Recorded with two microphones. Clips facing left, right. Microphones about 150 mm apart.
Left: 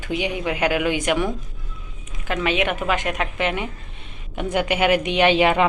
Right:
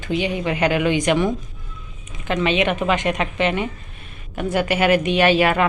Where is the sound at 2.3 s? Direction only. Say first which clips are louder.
Right 3 dB; 5° left (ahead or behind).